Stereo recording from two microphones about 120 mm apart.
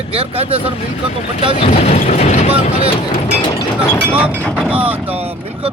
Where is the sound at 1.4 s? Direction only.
65° left (ahead or behind).